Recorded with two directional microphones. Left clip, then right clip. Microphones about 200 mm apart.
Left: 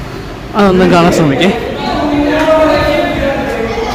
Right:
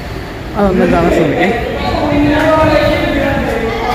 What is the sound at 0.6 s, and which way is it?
Speech, 15° left (ahead or behind).